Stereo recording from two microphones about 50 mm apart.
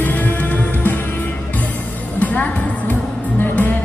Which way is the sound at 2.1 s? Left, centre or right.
Left.